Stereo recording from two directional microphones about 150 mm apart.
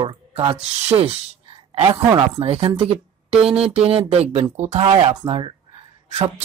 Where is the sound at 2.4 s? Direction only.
40° right (ahead or behind).